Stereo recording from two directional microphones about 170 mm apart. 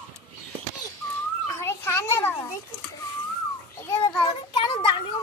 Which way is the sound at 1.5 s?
15° left (ahead or behind).